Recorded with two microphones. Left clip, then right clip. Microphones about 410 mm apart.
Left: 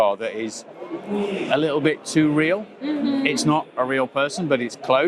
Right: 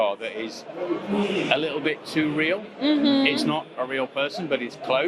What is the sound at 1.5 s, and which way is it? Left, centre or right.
Speech, left.